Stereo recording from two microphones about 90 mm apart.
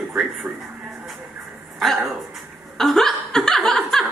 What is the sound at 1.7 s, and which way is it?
A man's voice, centre (ahead or behind).